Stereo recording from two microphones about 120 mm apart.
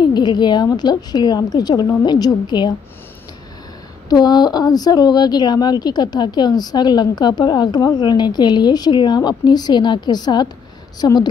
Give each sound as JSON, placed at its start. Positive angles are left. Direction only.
{"t": 0.0, "sound": "speech", "side_deg": 40}
{"t": 4.1, "sound": "speech", "side_deg": 35}